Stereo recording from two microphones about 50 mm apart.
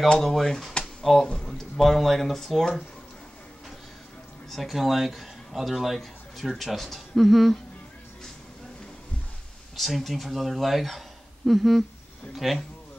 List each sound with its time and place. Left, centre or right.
0.2 s speech: centre
4.5 s a man's voice: centre
9.8 s speech: centre